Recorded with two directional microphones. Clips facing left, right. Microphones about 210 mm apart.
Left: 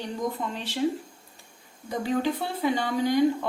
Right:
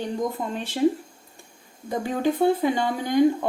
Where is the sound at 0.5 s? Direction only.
50° right (ahead or behind).